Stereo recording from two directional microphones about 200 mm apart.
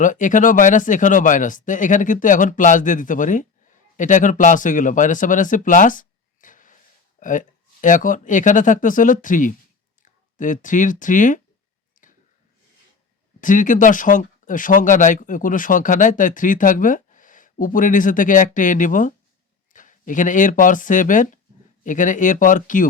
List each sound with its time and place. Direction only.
0.0 s speech: 40° left (ahead or behind)
12.0 s clicking: 40° left (ahead or behind)
13.4 s speech: 40° left (ahead or behind)